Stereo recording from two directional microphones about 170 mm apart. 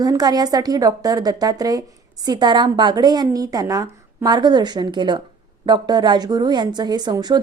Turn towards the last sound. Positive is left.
turn(degrees=-25)  # may be behind; listen again after turning